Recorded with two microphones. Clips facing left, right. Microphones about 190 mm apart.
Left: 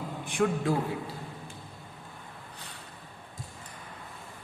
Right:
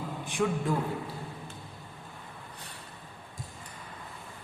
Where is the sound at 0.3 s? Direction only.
55° left (ahead or behind).